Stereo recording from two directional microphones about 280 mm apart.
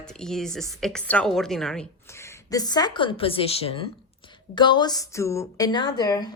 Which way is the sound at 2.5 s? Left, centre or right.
Centre.